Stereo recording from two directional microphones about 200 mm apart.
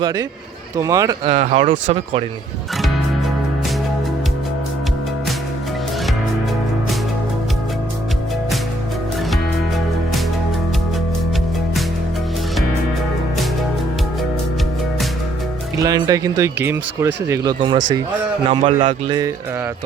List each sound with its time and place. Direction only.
0.0 s speech: 15° right (ahead or behind)
1.3 s speech: 35° right (ahead or behind)
15.8 s speech: 20° right (ahead or behind)
18.6 s speech: 40° right (ahead or behind)
19.0 s speech: 20° right (ahead or behind)